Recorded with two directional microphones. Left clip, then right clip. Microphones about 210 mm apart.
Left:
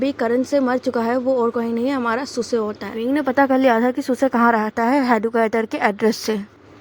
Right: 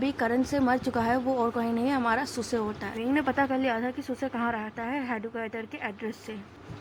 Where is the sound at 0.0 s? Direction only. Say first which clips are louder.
Left 8 dB; 20° left (ahead or behind); by 6.3 s 40° left (ahead or behind).